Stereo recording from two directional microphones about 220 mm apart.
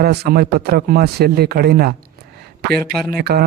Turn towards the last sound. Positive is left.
turn(degrees=-45)  # may be behind; listen again after turning